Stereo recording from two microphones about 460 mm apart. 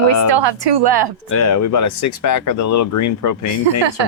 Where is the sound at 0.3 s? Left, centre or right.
Right.